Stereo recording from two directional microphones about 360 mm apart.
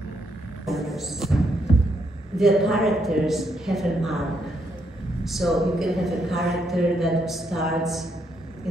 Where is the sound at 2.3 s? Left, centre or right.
Centre.